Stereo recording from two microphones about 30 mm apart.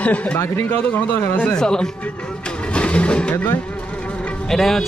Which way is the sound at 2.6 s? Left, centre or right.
Left.